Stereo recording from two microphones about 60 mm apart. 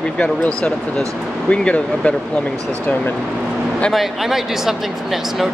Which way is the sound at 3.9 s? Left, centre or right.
Centre.